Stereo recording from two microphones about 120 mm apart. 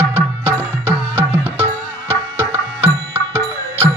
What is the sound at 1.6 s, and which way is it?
Music, 20° left (ahead or behind).